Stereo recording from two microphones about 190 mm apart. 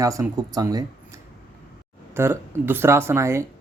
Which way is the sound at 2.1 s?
15° right (ahead or behind).